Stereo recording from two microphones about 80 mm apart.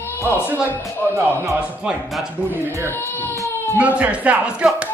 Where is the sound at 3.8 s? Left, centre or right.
Centre.